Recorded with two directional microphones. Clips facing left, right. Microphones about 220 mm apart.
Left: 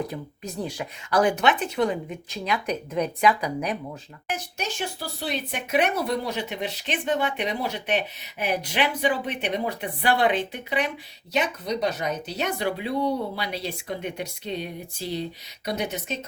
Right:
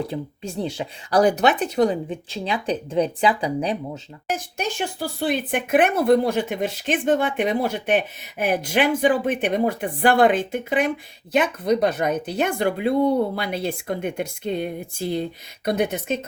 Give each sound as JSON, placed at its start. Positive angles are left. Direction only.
{"t": 0.1, "sound": "speech", "side_deg": -30}
{"t": 1.2, "sound": "speech", "side_deg": -35}
{"t": 4.3, "sound": "speech", "side_deg": -55}